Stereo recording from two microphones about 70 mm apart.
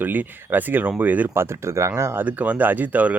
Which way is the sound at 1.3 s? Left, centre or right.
Right.